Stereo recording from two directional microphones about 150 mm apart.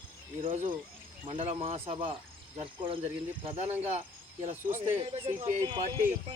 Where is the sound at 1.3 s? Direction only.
35° right (ahead or behind).